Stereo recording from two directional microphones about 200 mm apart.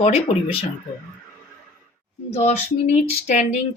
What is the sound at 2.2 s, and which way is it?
Speech, 30° left (ahead or behind).